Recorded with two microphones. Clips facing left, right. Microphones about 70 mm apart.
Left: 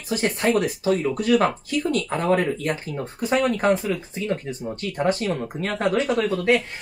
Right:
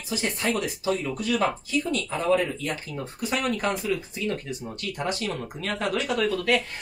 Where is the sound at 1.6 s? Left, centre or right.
Left.